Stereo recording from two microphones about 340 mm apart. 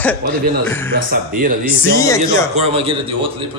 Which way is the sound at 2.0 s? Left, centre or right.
Centre.